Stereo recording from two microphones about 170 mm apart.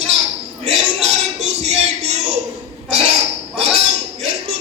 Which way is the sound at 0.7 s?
40° right (ahead or behind).